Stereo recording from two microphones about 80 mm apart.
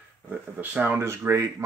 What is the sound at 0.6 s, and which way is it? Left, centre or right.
Speech, right.